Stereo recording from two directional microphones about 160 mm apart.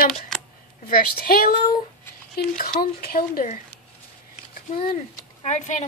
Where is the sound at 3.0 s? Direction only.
70° left (ahead or behind).